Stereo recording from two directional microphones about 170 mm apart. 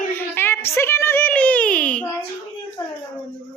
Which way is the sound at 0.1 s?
15° left (ahead or behind).